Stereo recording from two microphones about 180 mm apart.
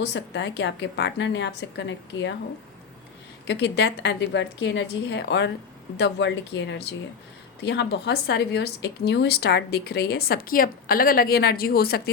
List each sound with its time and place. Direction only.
0.0 s a woman's voice: 75° left (ahead or behind)
3.4 s a woman's voice: 75° left (ahead or behind); by 12.1 s 60° left (ahead or behind)